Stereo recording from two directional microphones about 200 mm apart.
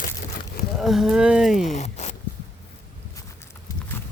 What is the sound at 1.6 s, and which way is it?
Speech, 35° left (ahead or behind).